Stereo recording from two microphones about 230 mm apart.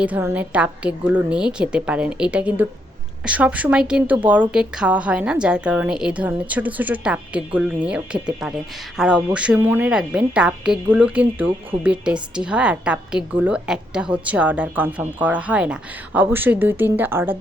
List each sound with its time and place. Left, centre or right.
0.0 s a woman's voice: centre